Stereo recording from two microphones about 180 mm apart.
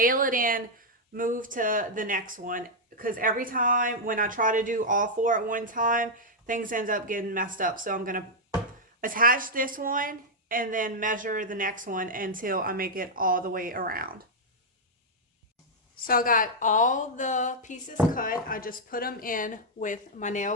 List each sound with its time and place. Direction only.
0.0 s speech: 50° right (ahead or behind)
16.0 s speech: 50° left (ahead or behind)